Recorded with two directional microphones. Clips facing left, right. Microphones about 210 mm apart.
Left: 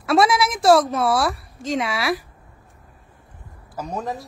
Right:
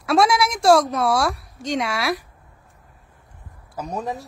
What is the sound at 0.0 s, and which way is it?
A woman's voice, centre (ahead or behind).